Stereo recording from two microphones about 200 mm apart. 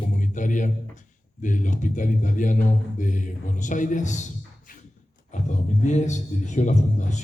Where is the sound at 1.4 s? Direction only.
40° left (ahead or behind).